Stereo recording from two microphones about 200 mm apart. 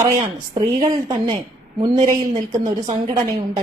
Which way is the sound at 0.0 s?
20° right (ahead or behind).